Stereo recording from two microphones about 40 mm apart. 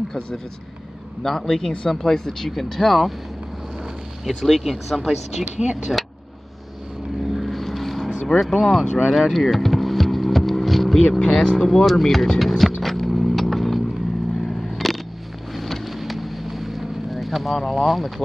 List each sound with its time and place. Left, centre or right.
1.2 s speech: centre
1.9 s speech: centre
4.3 s speech: centre
5.6 s speech: centre
7.3 s vehicle: centre
8.1 s vehicle: centre
8.4 s speech: centre
9.1 s vehicle: centre
11.1 s speech: centre
11.8 s speech: centre
12.4 s music: centre
12.8 s vehicle: centre